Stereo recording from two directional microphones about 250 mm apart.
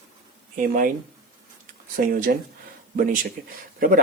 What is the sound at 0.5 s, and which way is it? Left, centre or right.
Speech, right.